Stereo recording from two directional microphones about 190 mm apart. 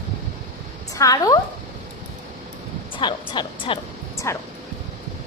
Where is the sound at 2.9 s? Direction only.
25° left (ahead or behind).